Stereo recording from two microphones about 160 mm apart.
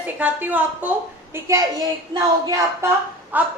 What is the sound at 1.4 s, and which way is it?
A woman's voice, 20° right (ahead or behind).